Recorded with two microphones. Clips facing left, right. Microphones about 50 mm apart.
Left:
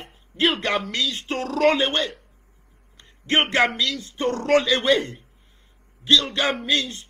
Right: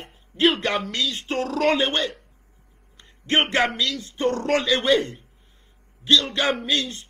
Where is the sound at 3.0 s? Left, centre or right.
Left.